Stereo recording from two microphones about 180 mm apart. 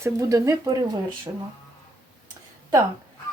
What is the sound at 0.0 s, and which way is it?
Speech, 15° right (ahead or behind).